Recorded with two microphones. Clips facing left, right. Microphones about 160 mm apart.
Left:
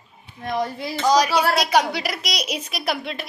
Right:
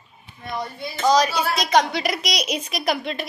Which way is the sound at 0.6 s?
90° left.